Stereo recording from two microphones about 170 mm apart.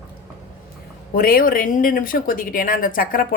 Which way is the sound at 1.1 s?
55° left (ahead or behind).